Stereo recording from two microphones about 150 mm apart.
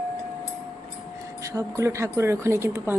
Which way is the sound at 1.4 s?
20° right (ahead or behind).